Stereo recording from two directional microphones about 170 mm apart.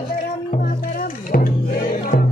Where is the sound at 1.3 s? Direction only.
60° left (ahead or behind).